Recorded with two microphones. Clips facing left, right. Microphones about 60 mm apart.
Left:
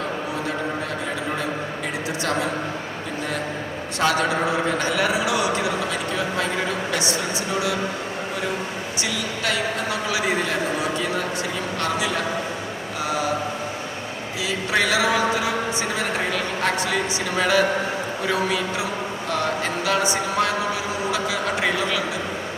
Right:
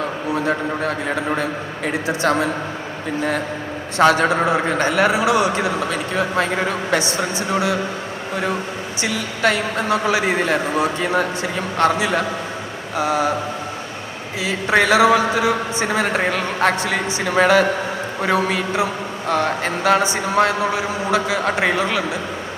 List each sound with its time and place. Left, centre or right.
2.0 s a man's voice: right
4.0 s a man's voice: right
9.0 s a man's voice: right
14.4 s a man's voice: right
16.2 s a man's voice: right
19.3 s a sound: right
20.4 s a man's voice: right